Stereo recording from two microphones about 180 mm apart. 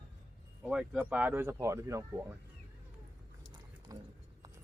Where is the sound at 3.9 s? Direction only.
20° right (ahead or behind).